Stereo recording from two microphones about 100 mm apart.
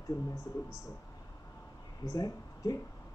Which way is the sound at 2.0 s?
35° left (ahead or behind).